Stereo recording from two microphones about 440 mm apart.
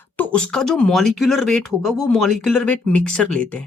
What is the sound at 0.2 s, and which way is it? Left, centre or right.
Speech, centre.